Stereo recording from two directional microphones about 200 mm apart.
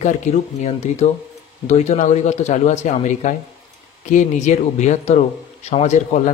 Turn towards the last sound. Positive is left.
turn(degrees=35)  # may be behind; listen again after turning